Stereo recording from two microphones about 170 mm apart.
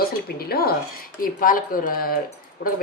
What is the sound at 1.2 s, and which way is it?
Speech, 55° left (ahead or behind).